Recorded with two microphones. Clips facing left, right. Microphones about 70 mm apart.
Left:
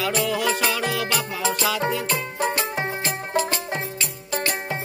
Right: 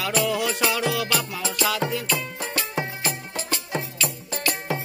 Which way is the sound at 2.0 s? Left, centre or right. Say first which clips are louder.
Left 4 dB; left.